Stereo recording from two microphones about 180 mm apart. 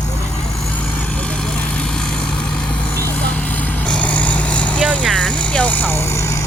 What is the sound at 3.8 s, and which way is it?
Vehicle, 5° left (ahead or behind).